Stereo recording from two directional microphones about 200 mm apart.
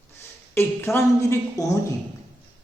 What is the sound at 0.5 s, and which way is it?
A man's voice, 10° left (ahead or behind).